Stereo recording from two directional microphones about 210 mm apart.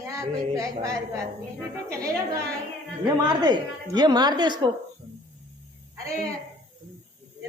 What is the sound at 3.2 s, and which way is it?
A woman's voice, 20° right (ahead or behind).